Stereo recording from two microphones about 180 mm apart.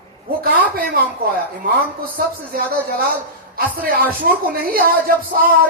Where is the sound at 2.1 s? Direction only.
55° right (ahead or behind).